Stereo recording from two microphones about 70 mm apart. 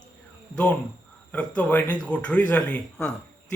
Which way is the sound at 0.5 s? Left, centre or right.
Centre.